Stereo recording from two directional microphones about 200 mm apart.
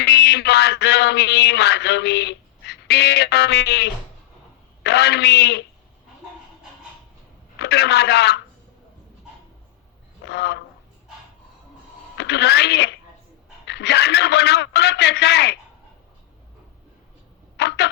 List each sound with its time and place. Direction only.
0.0 s a sound: 55° left (ahead or behind)
4.8 s a man's voice: 55° left (ahead or behind)
7.6 s a man's voice: 55° left (ahead or behind)
10.2 s a man's voice: 60° left (ahead or behind)
12.1 s a man's voice: 60° left (ahead or behind)
17.6 s a man's voice: 55° left (ahead or behind)